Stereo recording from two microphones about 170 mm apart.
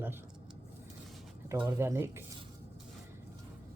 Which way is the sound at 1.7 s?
15° right (ahead or behind).